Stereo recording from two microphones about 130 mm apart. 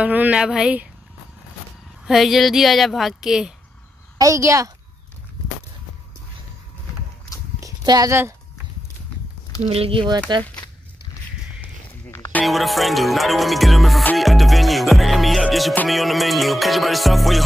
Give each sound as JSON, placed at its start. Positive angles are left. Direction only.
{"t": 0.0, "sound": "speech", "side_deg": -10}
{"t": 2.0, "sound": "music", "side_deg": 0}
{"t": 4.2, "sound": "a woman's voice", "side_deg": -25}
{"t": 7.6, "sound": "a sound", "side_deg": -30}
{"t": 8.1, "sound": "a woman's voice", "side_deg": -20}
{"t": 9.6, "sound": "speech", "side_deg": -50}
{"t": 12.1, "sound": "a sound", "side_deg": 15}
{"t": 12.4, "sound": "music", "side_deg": 0}